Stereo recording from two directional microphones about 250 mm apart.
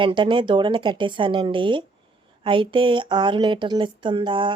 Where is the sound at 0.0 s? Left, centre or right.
Centre.